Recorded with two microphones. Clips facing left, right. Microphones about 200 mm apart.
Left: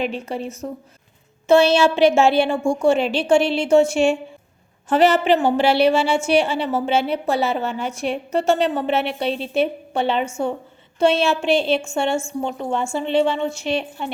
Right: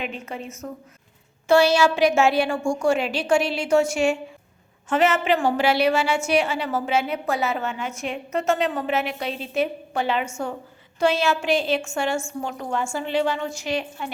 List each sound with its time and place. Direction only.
0.0 s a woman's voice: 35° left (ahead or behind)